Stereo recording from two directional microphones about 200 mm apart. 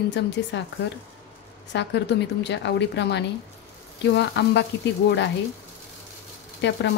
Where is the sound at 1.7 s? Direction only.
60° left (ahead or behind).